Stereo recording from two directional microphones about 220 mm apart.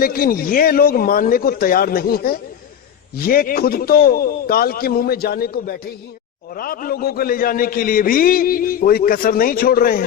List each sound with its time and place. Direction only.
0.0 s a man's voice: 40° left (ahead or behind)